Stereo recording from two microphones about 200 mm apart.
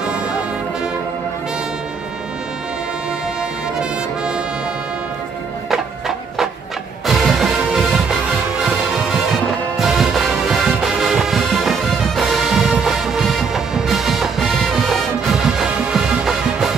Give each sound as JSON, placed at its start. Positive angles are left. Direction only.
{"t": 5.7, "sound": "music", "side_deg": 0}